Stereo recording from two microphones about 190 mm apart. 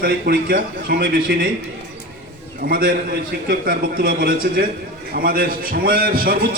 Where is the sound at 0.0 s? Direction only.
50° right (ahead or behind).